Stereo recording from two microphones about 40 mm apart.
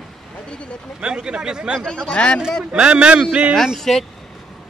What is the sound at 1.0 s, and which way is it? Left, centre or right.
Speech, right.